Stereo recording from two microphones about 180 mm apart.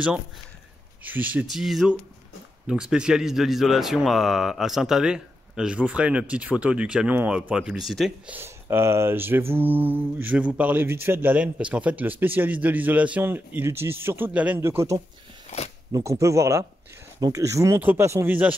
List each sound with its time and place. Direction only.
1.0 s speech: 10° right (ahead or behind)
8.4 s mantra: 15° right (ahead or behind)